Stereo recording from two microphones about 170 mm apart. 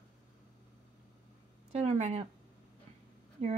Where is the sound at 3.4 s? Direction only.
35° right (ahead or behind).